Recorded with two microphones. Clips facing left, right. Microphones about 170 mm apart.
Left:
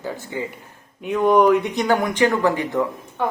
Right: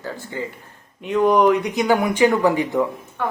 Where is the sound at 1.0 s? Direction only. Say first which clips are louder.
Even; 5° left (ahead or behind).